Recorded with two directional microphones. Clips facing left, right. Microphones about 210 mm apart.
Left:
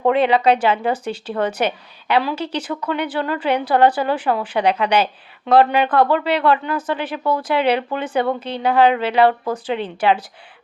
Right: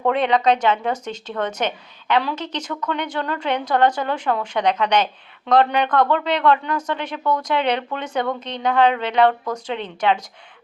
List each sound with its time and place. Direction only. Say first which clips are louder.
0.0 s speech: left 3 dB; 5° left (ahead or behind)